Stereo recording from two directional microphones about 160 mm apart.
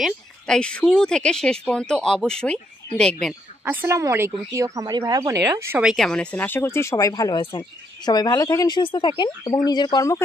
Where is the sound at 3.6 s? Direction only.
15° right (ahead or behind).